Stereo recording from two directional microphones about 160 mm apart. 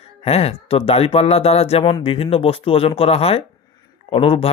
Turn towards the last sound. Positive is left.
turn(degrees=35)  # may be behind; listen again after turning